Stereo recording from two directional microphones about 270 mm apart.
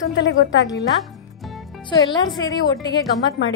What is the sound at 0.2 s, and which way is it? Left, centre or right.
Speech, left.